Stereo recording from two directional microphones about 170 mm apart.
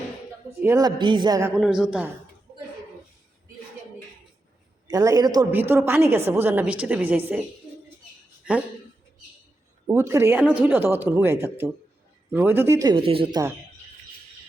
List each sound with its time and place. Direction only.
0.6 s a man's voice: 20° right (ahead or behind)
1.5 s a man's voice: 5° right (ahead or behind)
4.9 s a man's voice: 20° right (ahead or behind)
5.5 s speech: 15° right (ahead or behind)
8.4 s speech: 5° right (ahead or behind)
9.8 s speech: 20° right (ahead or behind)
13.0 s speech: 30° right (ahead or behind)